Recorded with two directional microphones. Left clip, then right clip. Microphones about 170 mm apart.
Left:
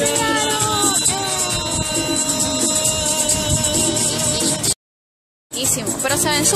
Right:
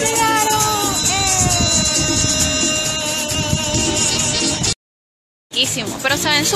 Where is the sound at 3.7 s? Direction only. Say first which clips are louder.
Right 2 dB; 15° left (ahead or behind).